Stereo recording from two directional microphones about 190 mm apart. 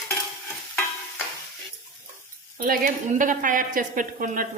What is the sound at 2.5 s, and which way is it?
A woman's voice, 45° right (ahead or behind).